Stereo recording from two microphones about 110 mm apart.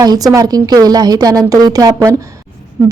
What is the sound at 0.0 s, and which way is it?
A woman's voice, 35° right (ahead or behind).